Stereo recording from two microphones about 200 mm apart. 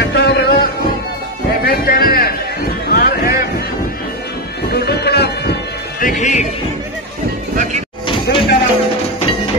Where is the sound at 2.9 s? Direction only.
50° left (ahead or behind).